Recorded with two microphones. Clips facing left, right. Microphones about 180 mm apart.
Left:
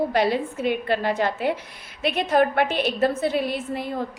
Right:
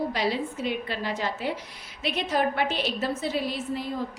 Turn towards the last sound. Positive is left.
turn(degrees=55)  # may be behind; listen again after turning